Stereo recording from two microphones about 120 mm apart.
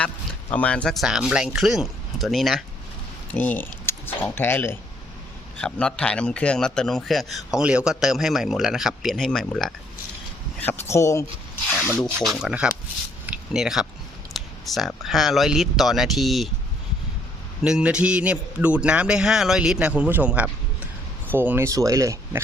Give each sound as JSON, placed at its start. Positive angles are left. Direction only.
{"t": 0.5, "sound": "a man's voice", "side_deg": 10}
{"t": 3.3, "sound": "a man's voice", "side_deg": 15}
{"t": 10.6, "sound": "speech", "side_deg": 20}
{"t": 11.8, "sound": "speech", "side_deg": 15}
{"t": 12.4, "sound": "a man's voice", "side_deg": -10}
{"t": 13.2, "sound": "a sound", "side_deg": -10}
{"t": 14.3, "sound": "a man's voice", "side_deg": 0}
{"t": 17.6, "sound": "a man's voice", "side_deg": -5}
{"t": 21.7, "sound": "speech", "side_deg": -30}